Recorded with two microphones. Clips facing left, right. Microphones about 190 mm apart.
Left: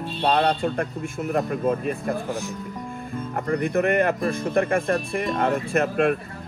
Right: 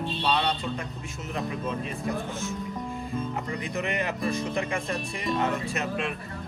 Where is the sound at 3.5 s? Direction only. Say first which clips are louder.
Left 13 dB; 55° left (ahead or behind).